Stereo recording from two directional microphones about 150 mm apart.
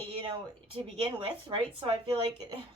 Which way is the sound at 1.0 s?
35° right (ahead or behind).